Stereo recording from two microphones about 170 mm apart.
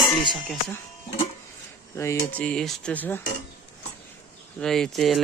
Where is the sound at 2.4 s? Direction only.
5° left (ahead or behind).